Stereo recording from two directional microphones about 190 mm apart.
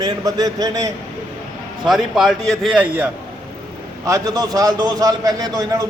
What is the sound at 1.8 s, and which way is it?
A man's voice, centre (ahead or behind).